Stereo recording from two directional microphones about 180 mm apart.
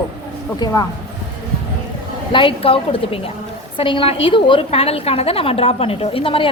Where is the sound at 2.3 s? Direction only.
30° left (ahead or behind).